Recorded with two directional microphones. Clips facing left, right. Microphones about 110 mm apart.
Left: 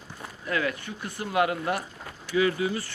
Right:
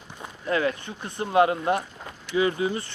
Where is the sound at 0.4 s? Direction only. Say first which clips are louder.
Right 4 dB; 30° right (ahead or behind).